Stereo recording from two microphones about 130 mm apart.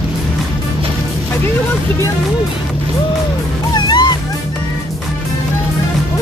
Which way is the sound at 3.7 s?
35° left (ahead or behind).